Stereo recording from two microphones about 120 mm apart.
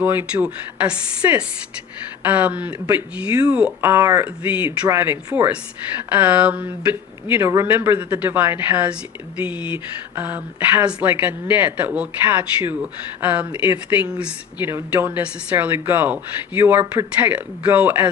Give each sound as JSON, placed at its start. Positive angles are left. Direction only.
{"t": 0.0, "sound": "speech", "side_deg": -15}
{"t": 3.8, "sound": "speech", "side_deg": -20}
{"t": 4.4, "sound": "speech", "side_deg": -10}
{"t": 7.3, "sound": "speech", "side_deg": -25}
{"t": 15.1, "sound": "speech", "side_deg": -15}